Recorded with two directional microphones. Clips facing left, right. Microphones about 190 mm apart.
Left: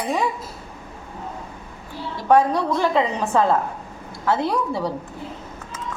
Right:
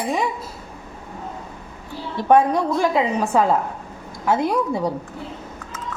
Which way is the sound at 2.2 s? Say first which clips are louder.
Right 1 dB; 20° right (ahead or behind).